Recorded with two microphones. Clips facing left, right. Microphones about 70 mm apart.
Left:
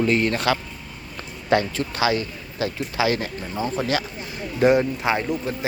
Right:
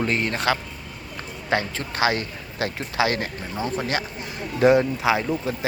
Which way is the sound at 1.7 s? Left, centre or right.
Right.